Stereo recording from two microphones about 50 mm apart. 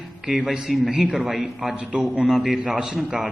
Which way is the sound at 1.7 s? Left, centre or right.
Right.